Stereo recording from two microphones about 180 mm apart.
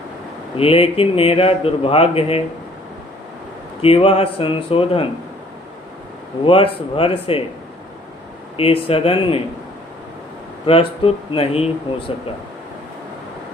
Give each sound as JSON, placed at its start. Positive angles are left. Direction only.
{"t": 0.5, "sound": "speech", "side_deg": 30}
{"t": 3.8, "sound": "speech", "side_deg": 30}
{"t": 6.4, "sound": "speech", "side_deg": 30}
{"t": 8.5, "sound": "speech", "side_deg": 30}
{"t": 10.7, "sound": "speech", "side_deg": 30}